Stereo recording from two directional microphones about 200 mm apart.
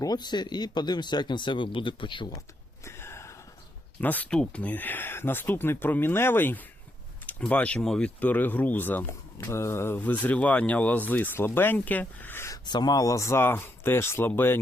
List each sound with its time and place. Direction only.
0.0 s speech: 20° left (ahead or behind)
2.8 s a sound: 10° left (ahead or behind)
4.0 s speech: 10° left (ahead or behind)